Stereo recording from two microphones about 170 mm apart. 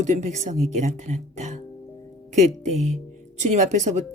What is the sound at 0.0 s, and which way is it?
Speech, 45° right (ahead or behind).